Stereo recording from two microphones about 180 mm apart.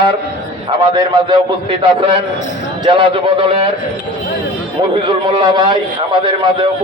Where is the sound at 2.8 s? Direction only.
30° right (ahead or behind).